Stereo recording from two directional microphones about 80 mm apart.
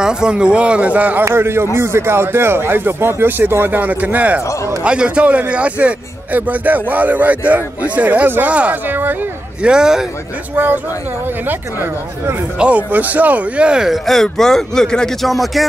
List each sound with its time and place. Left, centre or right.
0.0 s a man's voice: centre
1.2 s a man's voice: right
9.6 s a man's voice: centre
10.5 s a man's voice: right
12.5 s speech: centre